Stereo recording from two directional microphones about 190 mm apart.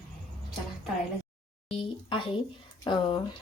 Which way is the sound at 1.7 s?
30° left (ahead or behind).